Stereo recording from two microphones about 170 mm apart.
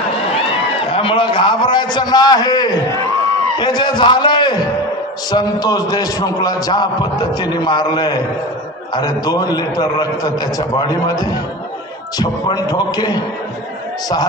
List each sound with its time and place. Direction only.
0.9 s a man's voice: 30° left (ahead or behind)